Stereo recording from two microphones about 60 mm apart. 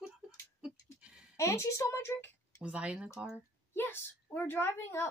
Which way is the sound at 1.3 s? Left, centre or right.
Left.